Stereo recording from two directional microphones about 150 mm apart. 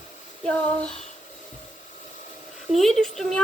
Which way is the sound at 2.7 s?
Centre (ahead or behind).